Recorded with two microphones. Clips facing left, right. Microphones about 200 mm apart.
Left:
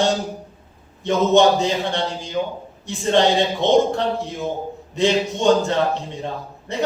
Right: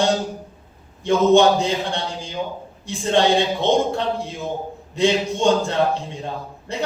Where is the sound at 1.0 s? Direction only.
20° left (ahead or behind).